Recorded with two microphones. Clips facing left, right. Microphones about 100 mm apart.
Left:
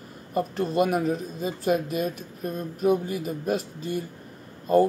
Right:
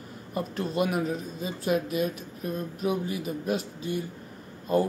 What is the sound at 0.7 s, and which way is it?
Speech, 45° left (ahead or behind).